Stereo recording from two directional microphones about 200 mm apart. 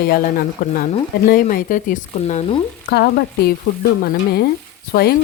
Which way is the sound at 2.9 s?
50° left (ahead or behind).